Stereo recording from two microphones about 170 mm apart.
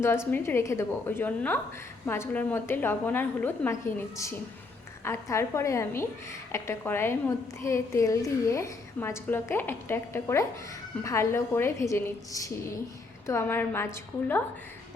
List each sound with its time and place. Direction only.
0.3 s a woman's voice: 15° left (ahead or behind)